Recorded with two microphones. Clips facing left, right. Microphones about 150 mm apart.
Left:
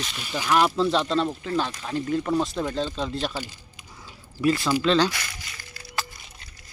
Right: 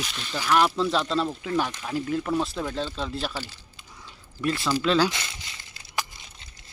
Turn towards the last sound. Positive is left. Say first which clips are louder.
# even
turn(degrees=-20)  # may be behind; listen again after turning